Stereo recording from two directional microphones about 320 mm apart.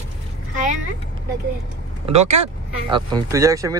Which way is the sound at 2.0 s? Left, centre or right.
Centre.